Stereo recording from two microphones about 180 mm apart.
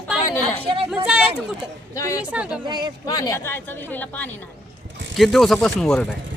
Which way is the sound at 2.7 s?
25° right (ahead or behind).